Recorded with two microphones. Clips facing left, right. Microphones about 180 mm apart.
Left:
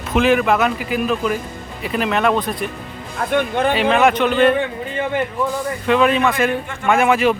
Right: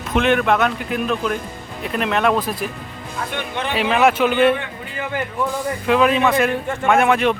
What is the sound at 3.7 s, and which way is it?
Speech, centre (ahead or behind).